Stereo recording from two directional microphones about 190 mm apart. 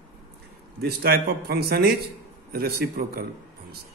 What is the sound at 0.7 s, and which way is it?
A man's voice, 55° right (ahead or behind).